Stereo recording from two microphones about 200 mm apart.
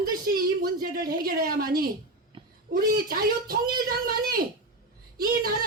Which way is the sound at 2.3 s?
25° right (ahead or behind).